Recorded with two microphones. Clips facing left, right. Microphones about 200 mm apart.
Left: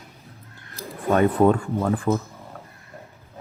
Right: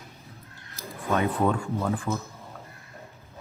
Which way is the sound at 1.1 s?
55° left (ahead or behind).